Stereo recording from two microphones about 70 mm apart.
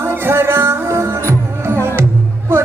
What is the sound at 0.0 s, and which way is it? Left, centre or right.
Music, right.